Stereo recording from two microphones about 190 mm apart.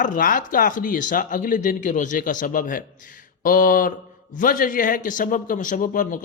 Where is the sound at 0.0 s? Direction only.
45° left (ahead or behind).